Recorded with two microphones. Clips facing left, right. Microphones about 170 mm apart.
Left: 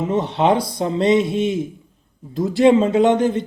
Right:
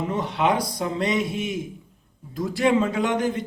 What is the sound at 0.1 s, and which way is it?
Speech, 25° left (ahead or behind).